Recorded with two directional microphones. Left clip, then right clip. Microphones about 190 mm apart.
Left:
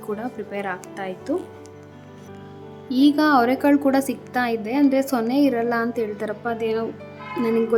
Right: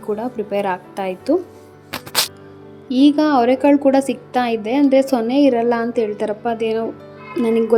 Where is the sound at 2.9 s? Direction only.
5° right (ahead or behind).